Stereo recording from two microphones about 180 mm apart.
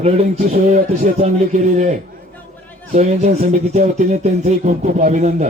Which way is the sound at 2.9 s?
40° right (ahead or behind).